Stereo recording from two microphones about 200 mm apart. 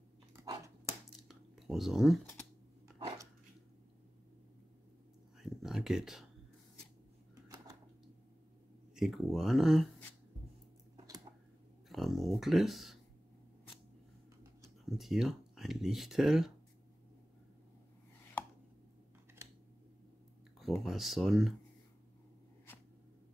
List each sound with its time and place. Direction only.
0.4 s dog: 15° right (ahead or behind)
1.3 s a sound: centre (ahead or behind)
3.0 s dog: 15° right (ahead or behind)
5.4 s a sound: centre (ahead or behind)
7.4 s a sound: 15° right (ahead or behind)
8.9 s speech: centre (ahead or behind)
11.9 s speech: centre (ahead or behind)
14.9 s speech: centre (ahead or behind)
19.4 s scissors: 15° right (ahead or behind)
20.5 s speech: centre (ahead or behind)